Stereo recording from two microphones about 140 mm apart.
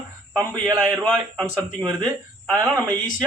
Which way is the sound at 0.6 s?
10° right (ahead or behind).